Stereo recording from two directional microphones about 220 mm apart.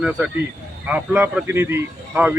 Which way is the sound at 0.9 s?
5° right (ahead or behind).